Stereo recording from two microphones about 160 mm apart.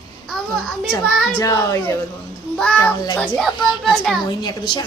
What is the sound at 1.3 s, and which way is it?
Speech, 20° left (ahead or behind).